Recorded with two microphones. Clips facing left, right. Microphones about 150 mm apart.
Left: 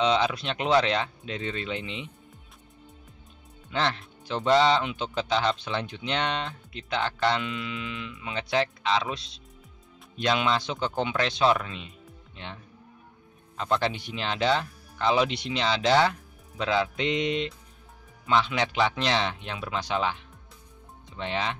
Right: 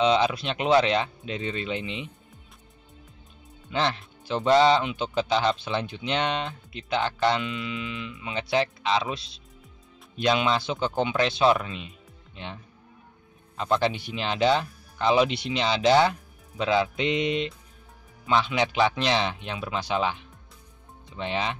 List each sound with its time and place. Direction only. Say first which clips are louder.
0.0 s speech: right 2 dB; 10° right (ahead or behind)
3.7 s speech: right 1 dB; 10° right (ahead or behind)
10.2 s speech: right 2 dB; 10° right (ahead or behind)
13.6 s speech: right 2 dB; 15° right (ahead or behind)